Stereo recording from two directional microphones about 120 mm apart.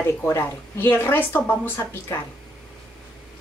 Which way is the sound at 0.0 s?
20° left (ahead or behind).